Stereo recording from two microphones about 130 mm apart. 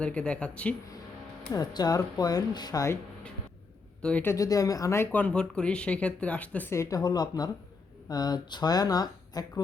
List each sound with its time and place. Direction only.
0.0 s speech: 10° left (ahead or behind)
1.5 s speech: 30° left (ahead or behind)
4.0 s speech: 15° left (ahead or behind)
4.4 s speech: 25° left (ahead or behind)
5.1 s speech: 10° left (ahead or behind)
6.7 s speech: 30° left (ahead or behind)